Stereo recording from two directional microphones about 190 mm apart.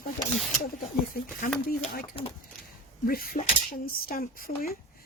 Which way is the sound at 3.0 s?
50° left (ahead or behind).